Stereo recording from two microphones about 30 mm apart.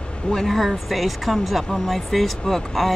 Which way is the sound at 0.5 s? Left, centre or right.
Centre.